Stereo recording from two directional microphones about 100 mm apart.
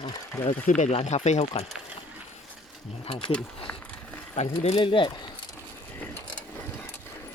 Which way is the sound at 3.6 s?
10° left (ahead or behind).